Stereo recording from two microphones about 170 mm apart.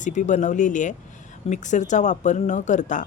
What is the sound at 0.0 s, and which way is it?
A woman's voice, 45° left (ahead or behind).